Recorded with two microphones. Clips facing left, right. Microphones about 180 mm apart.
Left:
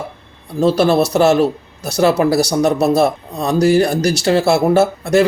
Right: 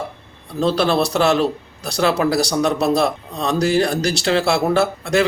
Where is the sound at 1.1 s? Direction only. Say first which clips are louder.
Left 4 dB; 20° left (ahead or behind).